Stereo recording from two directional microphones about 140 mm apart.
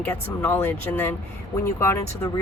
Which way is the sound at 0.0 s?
10° left (ahead or behind).